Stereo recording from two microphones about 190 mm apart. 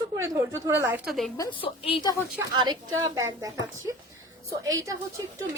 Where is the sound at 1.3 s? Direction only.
20° left (ahead or behind).